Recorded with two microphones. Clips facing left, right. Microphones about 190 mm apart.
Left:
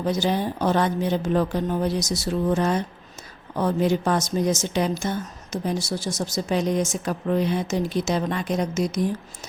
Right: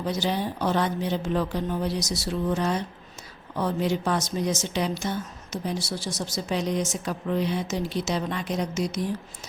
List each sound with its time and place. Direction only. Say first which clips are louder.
0.0 s a woman's voice: left 4 dB; 50° left (ahead or behind)